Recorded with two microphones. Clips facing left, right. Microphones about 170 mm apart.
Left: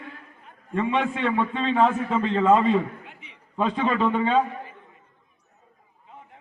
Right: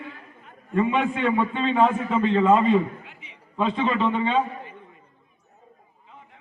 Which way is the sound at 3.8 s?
45° left (ahead or behind).